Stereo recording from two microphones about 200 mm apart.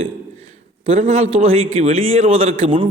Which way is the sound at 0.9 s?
35° right (ahead or behind).